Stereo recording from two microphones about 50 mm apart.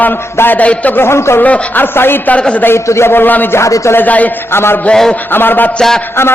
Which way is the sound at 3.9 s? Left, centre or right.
Left.